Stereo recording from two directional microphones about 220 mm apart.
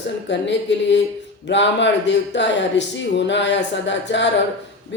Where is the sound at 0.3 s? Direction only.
55° left (ahead or behind).